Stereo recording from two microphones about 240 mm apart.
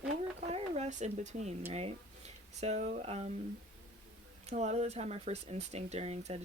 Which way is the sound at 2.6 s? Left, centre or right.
Right.